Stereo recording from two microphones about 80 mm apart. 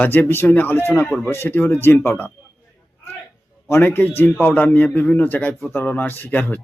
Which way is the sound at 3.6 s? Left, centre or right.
Left.